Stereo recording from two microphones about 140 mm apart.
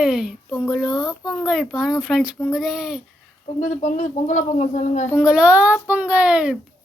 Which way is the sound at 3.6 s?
60° left (ahead or behind).